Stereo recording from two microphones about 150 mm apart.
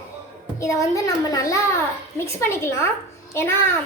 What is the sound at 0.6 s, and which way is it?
A child's voice, 20° left (ahead or behind).